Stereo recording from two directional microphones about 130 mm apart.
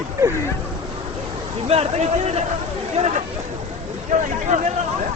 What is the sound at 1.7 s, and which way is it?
Speech, 50° right (ahead or behind).